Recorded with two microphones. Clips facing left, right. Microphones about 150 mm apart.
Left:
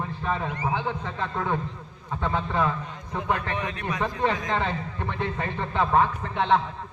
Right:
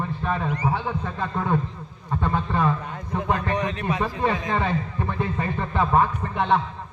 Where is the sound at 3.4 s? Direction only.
40° right (ahead or behind).